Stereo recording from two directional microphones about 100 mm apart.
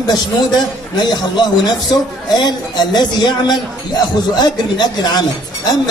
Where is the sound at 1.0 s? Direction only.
45° left (ahead or behind).